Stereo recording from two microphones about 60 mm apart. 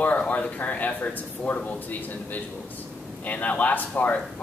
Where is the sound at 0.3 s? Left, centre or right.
Left.